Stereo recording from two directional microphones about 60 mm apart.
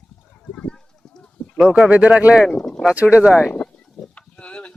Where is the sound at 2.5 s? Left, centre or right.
Centre.